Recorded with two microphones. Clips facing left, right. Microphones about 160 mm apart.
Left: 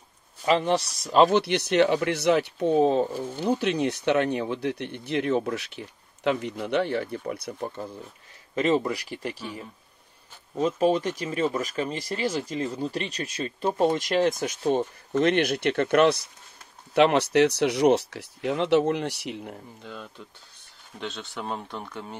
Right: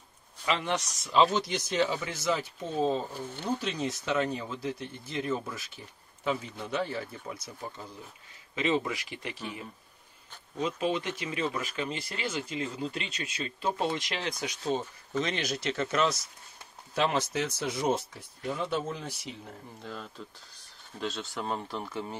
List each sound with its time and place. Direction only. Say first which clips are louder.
0.5 s speech: left 8 dB; 35° left (ahead or behind)
1.1 s speech: left 6 dB; 60° left (ahead or behind)
8.5 s speech: left 5 dB; 45° left (ahead or behind)
10.6 s speech: left 7 dB; 40° left (ahead or behind); by 19.5 s 70° left (ahead or behind)
19.8 s speech: left 1 dB; centre (ahead or behind)